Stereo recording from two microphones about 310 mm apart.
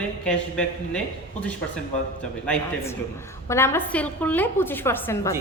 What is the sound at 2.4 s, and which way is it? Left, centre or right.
A woman's voice, centre.